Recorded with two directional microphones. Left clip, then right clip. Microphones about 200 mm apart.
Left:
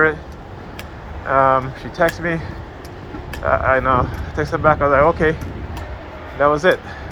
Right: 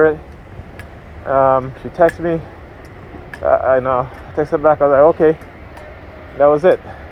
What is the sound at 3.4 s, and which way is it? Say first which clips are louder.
Speech: right 3 dB; 40° right (ahead or behind).